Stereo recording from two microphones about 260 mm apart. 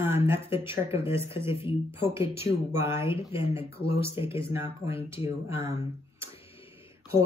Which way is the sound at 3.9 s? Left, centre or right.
Left.